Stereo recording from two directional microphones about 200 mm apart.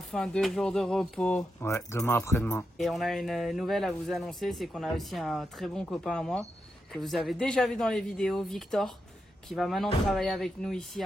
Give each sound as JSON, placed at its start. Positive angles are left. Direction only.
{"t": 0.1, "sound": "speech", "side_deg": 0}
{"t": 2.8, "sound": "speech", "side_deg": 0}